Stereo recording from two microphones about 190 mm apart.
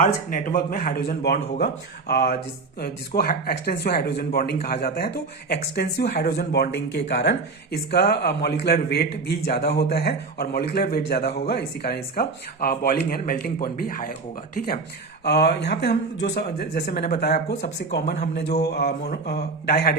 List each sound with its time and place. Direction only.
0.0 s speech: 45° left (ahead or behind)
15.2 s speech: 60° left (ahead or behind)
17.3 s speech: 40° left (ahead or behind)
18.1 s speech: 55° left (ahead or behind)